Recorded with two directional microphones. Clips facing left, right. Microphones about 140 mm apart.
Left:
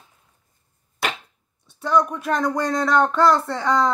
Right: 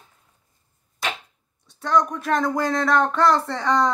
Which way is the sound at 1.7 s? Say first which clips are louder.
Left 1 dB; 5° left (ahead or behind).